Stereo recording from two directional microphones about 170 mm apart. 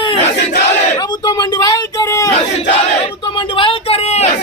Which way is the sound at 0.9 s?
25° left (ahead or behind).